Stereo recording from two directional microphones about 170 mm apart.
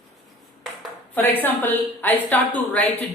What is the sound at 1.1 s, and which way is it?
A man's voice, 10° left (ahead or behind).